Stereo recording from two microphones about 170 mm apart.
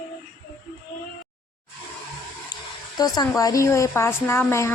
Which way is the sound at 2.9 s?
25° left (ahead or behind).